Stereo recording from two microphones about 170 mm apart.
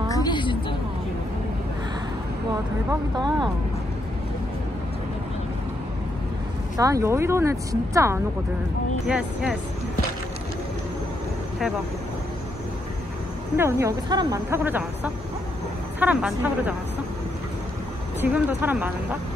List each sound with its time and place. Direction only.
0.1 s a sound: 25° left (ahead or behind)
2.9 s speech: 25° right (ahead or behind)
6.8 s a woman's voice: 20° right (ahead or behind)
9.0 s speech: 5° right (ahead or behind)
13.6 s a woman's voice: 15° right (ahead or behind)
18.2 s a woman's voice: 10° right (ahead or behind)